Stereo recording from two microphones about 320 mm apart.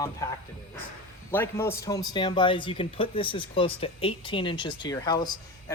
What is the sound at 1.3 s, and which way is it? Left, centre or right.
Speech, centre.